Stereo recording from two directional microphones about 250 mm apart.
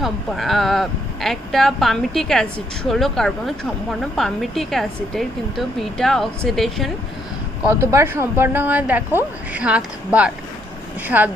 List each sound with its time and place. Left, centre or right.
0.0 s speech: centre
7.9 s a woman's voice: centre